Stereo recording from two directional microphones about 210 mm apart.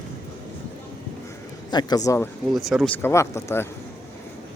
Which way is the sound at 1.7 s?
20° left (ahead or behind).